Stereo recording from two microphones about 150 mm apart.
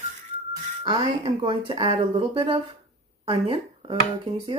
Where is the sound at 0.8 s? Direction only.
30° right (ahead or behind).